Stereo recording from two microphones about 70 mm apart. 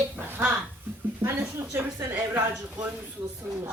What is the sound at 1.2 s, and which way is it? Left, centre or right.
Speech, right.